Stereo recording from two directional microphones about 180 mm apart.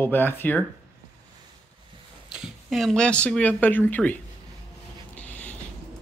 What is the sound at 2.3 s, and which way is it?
Speech, 5° right (ahead or behind).